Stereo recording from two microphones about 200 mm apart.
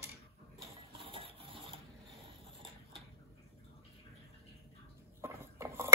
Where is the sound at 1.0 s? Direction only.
30° right (ahead or behind).